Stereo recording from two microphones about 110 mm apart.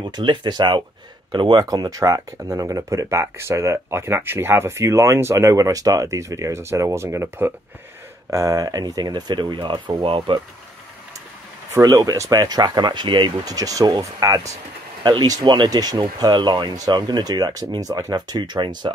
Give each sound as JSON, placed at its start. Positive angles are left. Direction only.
{"t": 0.1, "sound": "speech", "side_deg": -45}
{"t": 11.7, "sound": "speech", "side_deg": -35}
{"t": 13.5, "sound": "speech", "side_deg": -30}